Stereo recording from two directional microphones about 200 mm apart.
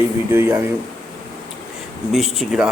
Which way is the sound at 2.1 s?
Centre (ahead or behind).